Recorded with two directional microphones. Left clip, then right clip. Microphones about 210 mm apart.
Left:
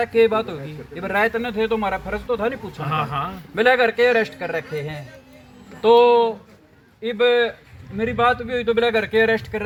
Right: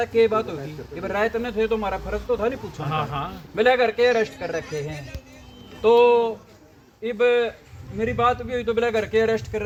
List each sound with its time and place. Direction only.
0.0 s speech: 15° left (ahead or behind)
2.8 s speech: 25° left (ahead or behind)
3.5 s speech: 10° left (ahead or behind)